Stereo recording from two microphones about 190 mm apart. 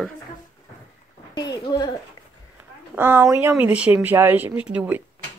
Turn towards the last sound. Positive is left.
turn(degrees=-5)  # may be behind; listen again after turning